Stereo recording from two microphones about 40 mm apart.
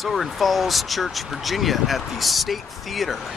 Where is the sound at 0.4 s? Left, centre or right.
Centre.